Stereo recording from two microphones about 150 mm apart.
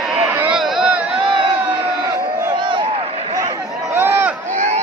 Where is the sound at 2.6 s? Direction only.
30° right (ahead or behind).